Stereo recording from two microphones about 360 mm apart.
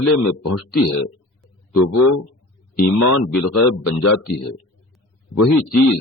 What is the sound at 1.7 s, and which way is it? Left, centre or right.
Speech, left.